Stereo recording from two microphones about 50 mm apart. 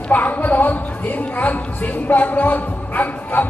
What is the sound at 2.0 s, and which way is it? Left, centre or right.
Speech, left.